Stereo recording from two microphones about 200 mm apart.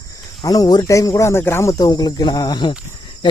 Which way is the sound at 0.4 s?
20° left (ahead or behind).